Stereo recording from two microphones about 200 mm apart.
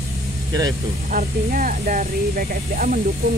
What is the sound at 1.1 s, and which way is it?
Speech, 40° right (ahead or behind).